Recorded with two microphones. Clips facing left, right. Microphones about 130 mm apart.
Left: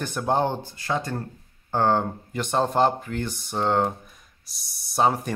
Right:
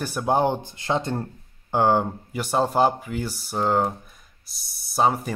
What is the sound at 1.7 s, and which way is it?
Speech, 10° right (ahead or behind).